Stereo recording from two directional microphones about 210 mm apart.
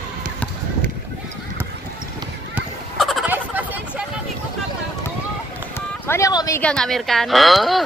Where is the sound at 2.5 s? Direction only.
Centre (ahead or behind).